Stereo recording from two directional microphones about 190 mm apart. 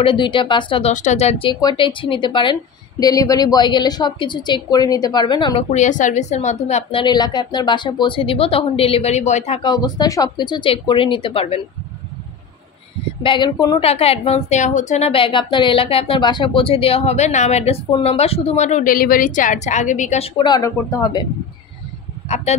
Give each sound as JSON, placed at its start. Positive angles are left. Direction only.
{"t": 0.0, "sound": "a woman's voice", "side_deg": 25}
{"t": 0.9, "sound": "a woman's voice", "side_deg": 35}
{"t": 5.7, "sound": "a woman's voice", "side_deg": 40}
{"t": 13.2, "sound": "a woman's voice", "side_deg": 25}
{"t": 22.3, "sound": "a woman's voice", "side_deg": 35}